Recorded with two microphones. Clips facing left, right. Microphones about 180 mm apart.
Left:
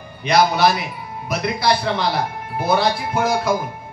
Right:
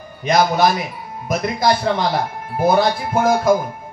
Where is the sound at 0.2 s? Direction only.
45° right (ahead or behind).